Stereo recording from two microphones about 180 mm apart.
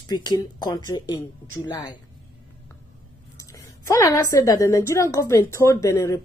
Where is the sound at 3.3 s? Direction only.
15° left (ahead or behind).